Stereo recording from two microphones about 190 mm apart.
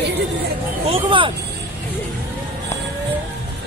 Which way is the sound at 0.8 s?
30° right (ahead or behind).